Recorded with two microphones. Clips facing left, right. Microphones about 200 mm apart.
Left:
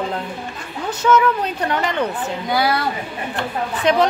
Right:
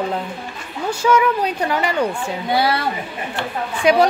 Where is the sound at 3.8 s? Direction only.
10° right (ahead or behind).